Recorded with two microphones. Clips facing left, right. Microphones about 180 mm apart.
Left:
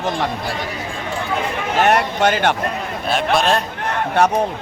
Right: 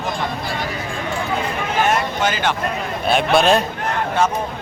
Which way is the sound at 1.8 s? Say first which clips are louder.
Left 4 dB; 65° left (ahead or behind).